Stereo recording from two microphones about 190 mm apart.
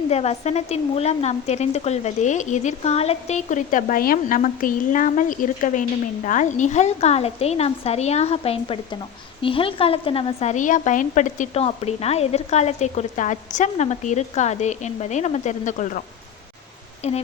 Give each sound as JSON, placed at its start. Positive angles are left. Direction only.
{"t": 0.1, "sound": "a woman's voice", "side_deg": 35}